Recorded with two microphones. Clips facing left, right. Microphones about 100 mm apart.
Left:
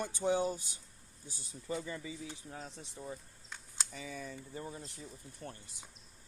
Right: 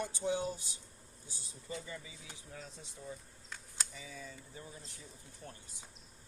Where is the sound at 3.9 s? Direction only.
60° left (ahead or behind).